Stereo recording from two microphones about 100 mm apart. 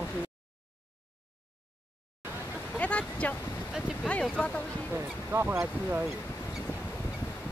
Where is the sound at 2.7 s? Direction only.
15° left (ahead or behind).